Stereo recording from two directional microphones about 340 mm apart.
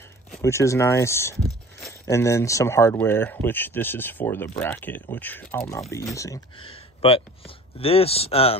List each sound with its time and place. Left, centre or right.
0.3 s speech: centre